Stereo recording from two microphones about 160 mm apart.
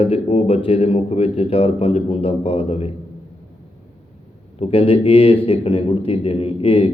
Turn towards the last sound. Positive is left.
turn(degrees=35)  # may be behind; listen again after turning